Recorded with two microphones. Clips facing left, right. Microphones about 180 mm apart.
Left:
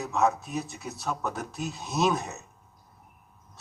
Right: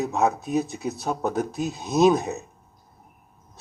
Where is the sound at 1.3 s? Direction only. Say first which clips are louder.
Right 8 dB; 40° right (ahead or behind).